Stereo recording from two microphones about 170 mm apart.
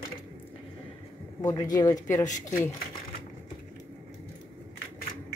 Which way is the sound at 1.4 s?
20° left (ahead or behind).